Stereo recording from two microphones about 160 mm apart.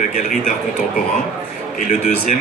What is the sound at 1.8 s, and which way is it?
Speech, 55° left (ahead or behind).